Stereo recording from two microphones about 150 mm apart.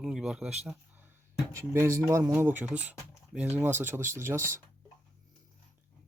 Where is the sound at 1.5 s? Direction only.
15° right (ahead or behind).